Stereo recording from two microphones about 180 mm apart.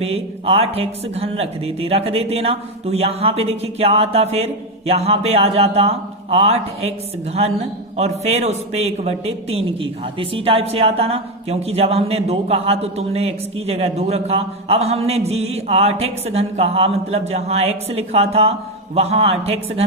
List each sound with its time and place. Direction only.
0.0 s a man's voice: 35° right (ahead or behind)
7.9 s a man's voice: 35° right (ahead or behind)